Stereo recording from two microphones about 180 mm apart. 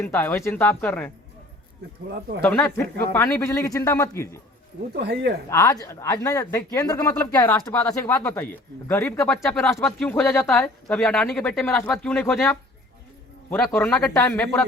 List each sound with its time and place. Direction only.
0.0 s speech: 10° left (ahead or behind)
2.4 s speech: 10° left (ahead or behind)
4.9 s speech: 70° right (ahead or behind)
5.5 s speech: 20° left (ahead or behind)